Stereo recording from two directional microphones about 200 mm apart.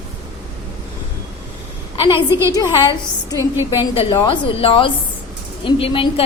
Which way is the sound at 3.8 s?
20° left (ahead or behind).